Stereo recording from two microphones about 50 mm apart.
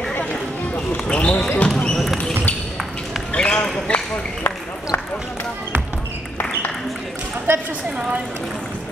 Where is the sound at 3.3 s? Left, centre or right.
Left.